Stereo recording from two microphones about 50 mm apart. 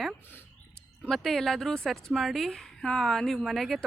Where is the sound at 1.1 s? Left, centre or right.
Centre.